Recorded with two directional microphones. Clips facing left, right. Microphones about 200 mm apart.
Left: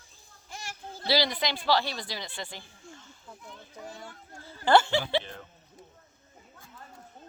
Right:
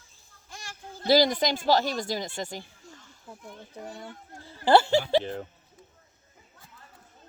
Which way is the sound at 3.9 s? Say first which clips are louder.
Right 3 dB; 15° right (ahead or behind).